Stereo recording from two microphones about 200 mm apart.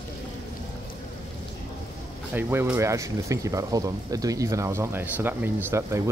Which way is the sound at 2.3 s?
10° right (ahead or behind).